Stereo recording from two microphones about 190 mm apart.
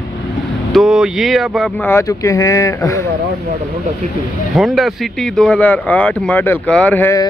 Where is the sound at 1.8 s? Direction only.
15° left (ahead or behind).